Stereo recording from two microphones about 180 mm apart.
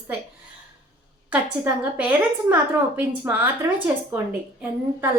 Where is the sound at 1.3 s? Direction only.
10° right (ahead or behind).